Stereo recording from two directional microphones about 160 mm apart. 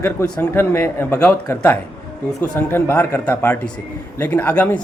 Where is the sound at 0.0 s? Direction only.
10° left (ahead or behind).